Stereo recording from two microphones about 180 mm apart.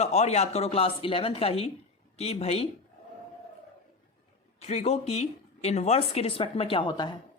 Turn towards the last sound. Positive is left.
turn(degrees=25)  # may be behind; listen again after turning